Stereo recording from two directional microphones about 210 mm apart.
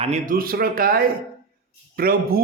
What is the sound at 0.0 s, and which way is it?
A man's voice, 35° right (ahead or behind).